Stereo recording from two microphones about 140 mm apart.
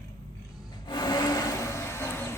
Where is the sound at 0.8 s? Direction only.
30° left (ahead or behind).